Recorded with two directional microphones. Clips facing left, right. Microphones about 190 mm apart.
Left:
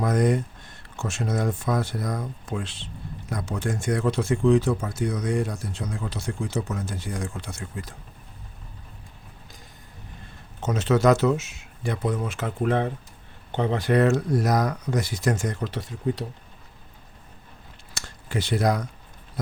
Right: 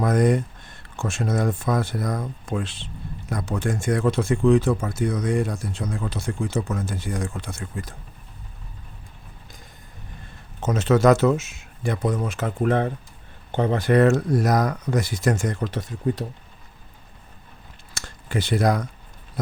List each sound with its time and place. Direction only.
0.0 s speech: 50° right (ahead or behind)
10.6 s speech: 50° right (ahead or behind)
17.9 s a sound: 55° right (ahead or behind)